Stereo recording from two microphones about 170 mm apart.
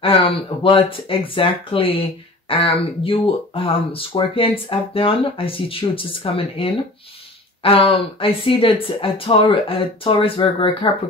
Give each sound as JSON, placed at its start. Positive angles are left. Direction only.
{"t": 0.0, "sound": "speech", "side_deg": 30}